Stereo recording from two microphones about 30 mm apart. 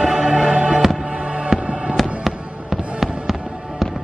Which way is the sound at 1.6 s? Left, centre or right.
Right.